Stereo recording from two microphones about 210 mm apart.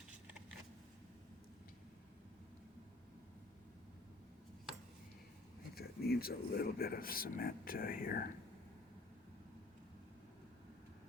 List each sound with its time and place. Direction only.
5.7 s speech: 50° left (ahead or behind)